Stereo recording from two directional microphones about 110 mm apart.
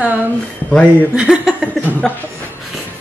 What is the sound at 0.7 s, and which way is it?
Speech, 10° left (ahead or behind).